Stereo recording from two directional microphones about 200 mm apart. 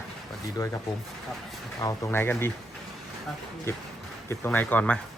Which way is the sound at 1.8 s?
15° left (ahead or behind).